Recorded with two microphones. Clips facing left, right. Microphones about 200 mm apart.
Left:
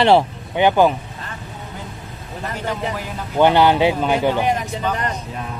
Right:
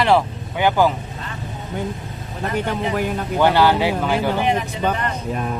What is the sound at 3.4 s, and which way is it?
Speech, 20° left (ahead or behind).